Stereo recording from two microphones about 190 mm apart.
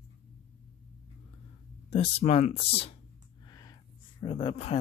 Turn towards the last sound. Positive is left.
turn(degrees=30)  # may be behind; listen again after turning